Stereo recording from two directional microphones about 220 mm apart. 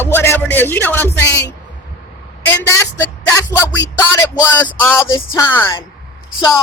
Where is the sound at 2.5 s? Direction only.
15° left (ahead or behind).